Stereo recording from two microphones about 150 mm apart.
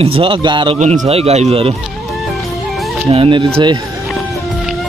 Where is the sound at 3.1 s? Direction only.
35° right (ahead or behind).